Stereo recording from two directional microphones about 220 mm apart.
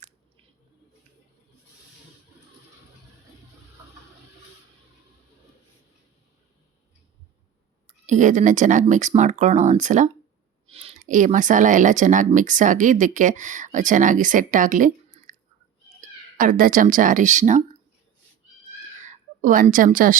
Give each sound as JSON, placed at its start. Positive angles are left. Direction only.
{"t": 8.0, "sound": "speech", "side_deg": -35}
{"t": 19.0, "sound": "a woman's voice", "side_deg": -35}